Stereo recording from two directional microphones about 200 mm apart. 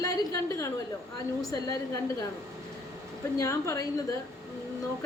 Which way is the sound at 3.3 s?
15° left (ahead or behind).